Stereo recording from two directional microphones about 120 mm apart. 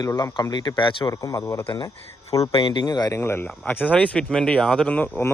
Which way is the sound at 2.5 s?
40° left (ahead or behind).